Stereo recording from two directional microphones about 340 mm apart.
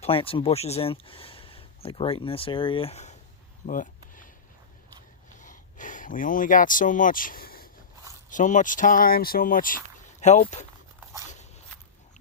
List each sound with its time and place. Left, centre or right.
0.0 s speech: centre
3.7 s a sound: left
5.4 s speech: left